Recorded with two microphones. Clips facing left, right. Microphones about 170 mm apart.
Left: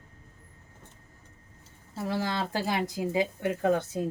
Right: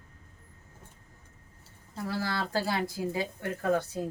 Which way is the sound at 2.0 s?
20° left (ahead or behind).